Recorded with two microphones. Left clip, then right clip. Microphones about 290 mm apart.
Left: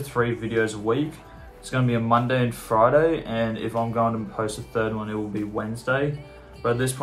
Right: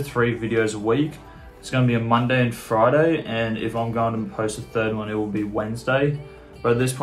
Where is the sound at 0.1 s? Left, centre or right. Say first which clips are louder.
Right 2 dB; centre.